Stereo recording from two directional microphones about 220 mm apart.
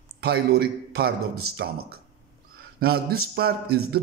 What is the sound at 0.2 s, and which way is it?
A man's voice, 45° right (ahead or behind).